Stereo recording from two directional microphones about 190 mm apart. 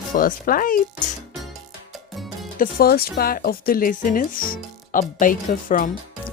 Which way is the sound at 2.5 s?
50° left (ahead or behind).